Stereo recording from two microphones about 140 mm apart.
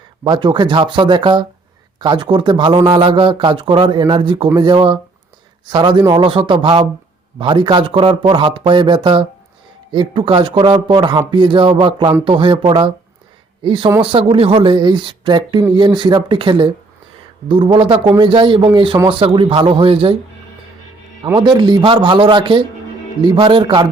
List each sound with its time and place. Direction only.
0.3 s speech: 35° right (ahead or behind)
21.3 s speech: 30° right (ahead or behind)